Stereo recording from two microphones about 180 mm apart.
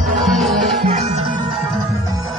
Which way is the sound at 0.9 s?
40° right (ahead or behind).